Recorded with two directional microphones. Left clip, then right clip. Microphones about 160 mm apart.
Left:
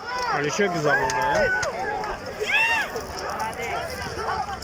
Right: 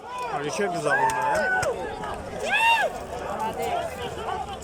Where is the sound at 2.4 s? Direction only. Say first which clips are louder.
Right 1 dB; 65° right (ahead or behind).